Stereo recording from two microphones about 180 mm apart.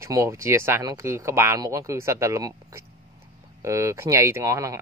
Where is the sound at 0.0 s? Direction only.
15° right (ahead or behind).